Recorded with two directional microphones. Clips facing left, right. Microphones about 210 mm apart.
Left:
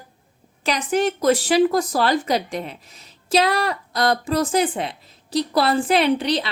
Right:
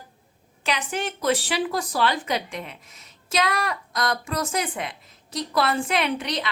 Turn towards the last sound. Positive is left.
turn(degrees=30)  # may be behind; listen again after turning